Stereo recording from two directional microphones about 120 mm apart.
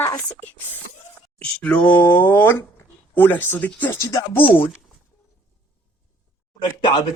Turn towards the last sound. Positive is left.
turn(degrees=40)  # may be behind; listen again after turning